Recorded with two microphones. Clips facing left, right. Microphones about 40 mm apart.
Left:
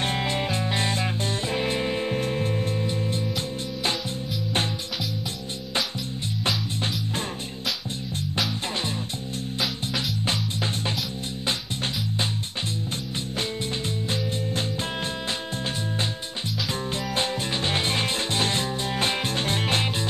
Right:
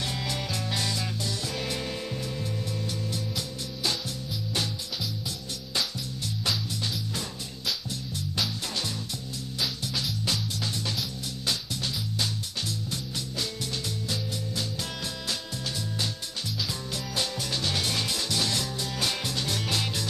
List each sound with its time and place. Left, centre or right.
0.0 s music: left
6.4 s music: left
9.6 s music: left
14.0 s music: left
16.9 s music: left